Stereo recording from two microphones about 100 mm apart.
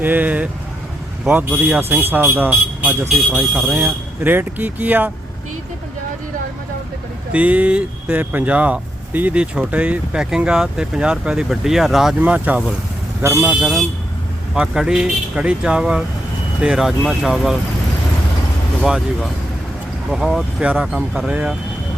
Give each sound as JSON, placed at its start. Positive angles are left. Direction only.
{"t": 0.0, "sound": "speech", "side_deg": -15}
{"t": 7.3, "sound": "speech", "side_deg": -15}
{"t": 12.2, "sound": "speech", "side_deg": -15}
{"t": 18.8, "sound": "speech", "side_deg": 0}